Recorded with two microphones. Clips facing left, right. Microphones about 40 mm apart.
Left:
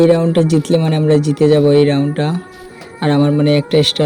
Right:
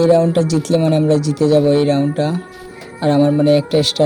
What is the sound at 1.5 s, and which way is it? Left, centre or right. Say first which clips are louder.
Speech: left 1 dB; left.